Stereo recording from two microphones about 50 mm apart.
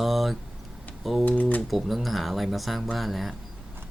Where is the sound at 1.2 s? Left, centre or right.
Left.